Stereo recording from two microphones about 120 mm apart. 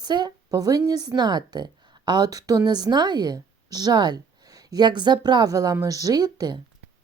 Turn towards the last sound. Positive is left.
turn(degrees=-35)  # may be behind; listen again after turning